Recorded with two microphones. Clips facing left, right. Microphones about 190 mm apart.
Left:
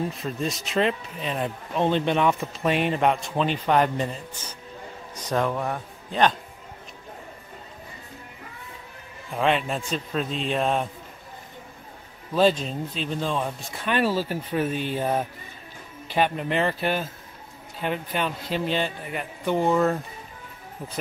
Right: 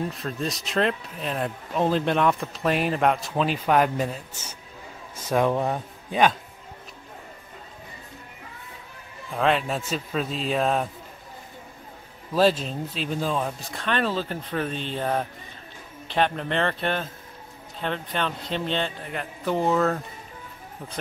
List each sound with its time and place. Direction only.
0.1 s speech: centre (ahead or behind)
5.5 s speech: 25° right (ahead or behind)
9.3 s speech: centre (ahead or behind)
12.4 s speech: centre (ahead or behind)